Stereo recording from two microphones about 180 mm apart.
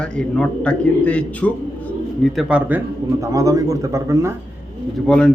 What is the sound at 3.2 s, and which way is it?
Speech, 20° right (ahead or behind).